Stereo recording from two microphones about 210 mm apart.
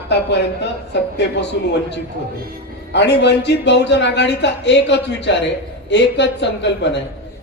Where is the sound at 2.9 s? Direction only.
55° left (ahead or behind).